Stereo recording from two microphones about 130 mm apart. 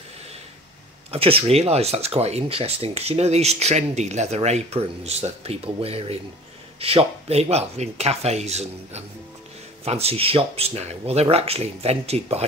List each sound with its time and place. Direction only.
1.1 s speech: 50° right (ahead or behind)